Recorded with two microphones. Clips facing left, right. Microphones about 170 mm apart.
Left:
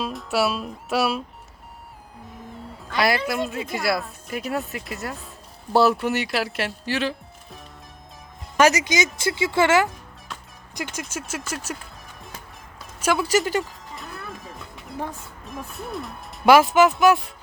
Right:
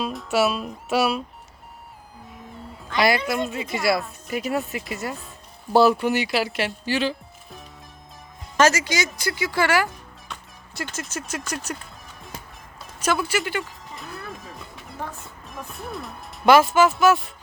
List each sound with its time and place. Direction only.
0.0 s speech: centre (ahead or behind)
2.8 s speech: centre (ahead or behind)
8.5 s speech: 15° left (ahead or behind)
11.0 s speech: 5° left (ahead or behind)
13.2 s speech: 40° left (ahead or behind)
13.9 s music: centre (ahead or behind)
15.4 s speech: centre (ahead or behind)
17.0 s music: 15° left (ahead or behind)